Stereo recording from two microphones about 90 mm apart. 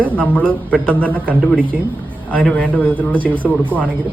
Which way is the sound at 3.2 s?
20° right (ahead or behind).